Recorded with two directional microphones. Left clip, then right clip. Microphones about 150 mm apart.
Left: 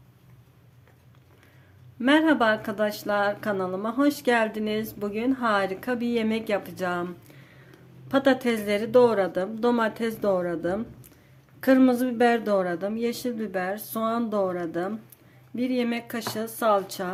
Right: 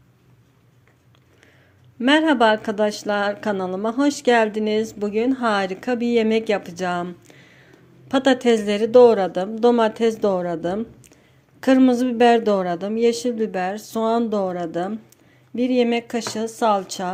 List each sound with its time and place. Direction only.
2.0 s a woman's voice: 30° right (ahead or behind)